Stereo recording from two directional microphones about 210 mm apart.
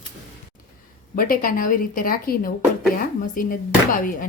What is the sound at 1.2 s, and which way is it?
Speech, 40° left (ahead or behind).